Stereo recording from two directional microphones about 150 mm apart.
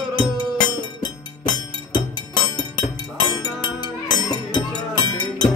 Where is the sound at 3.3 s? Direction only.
30° left (ahead or behind).